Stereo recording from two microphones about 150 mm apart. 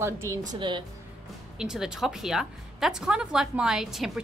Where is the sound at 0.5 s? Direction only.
30° right (ahead or behind).